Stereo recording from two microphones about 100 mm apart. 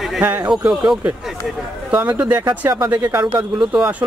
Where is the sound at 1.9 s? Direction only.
15° right (ahead or behind).